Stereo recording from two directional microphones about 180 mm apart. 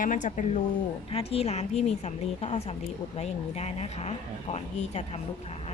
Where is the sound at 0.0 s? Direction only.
45° left (ahead or behind).